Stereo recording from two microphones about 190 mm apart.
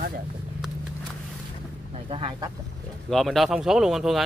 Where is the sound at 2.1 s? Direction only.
25° right (ahead or behind).